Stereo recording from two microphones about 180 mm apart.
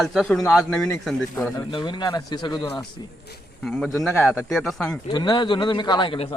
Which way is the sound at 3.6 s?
Centre (ahead or behind).